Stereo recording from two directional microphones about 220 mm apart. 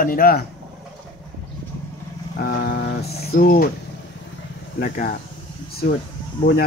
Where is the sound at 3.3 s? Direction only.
40° left (ahead or behind).